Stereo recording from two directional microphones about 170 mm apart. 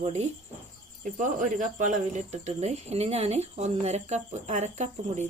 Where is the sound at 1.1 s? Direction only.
50° right (ahead or behind).